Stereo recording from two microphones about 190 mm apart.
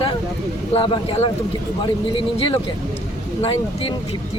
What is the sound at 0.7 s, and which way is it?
Speech, 30° left (ahead or behind).